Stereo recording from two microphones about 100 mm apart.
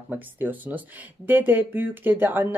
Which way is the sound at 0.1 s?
15° right (ahead or behind).